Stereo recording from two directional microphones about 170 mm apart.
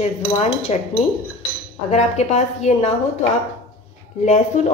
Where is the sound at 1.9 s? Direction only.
40° left (ahead or behind).